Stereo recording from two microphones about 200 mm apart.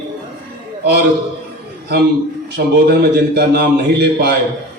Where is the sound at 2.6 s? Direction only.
55° right (ahead or behind).